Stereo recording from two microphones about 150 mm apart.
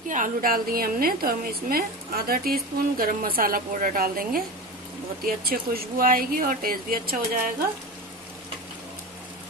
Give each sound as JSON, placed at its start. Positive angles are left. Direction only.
{"t": 0.1, "sound": "a woman's voice", "side_deg": -65}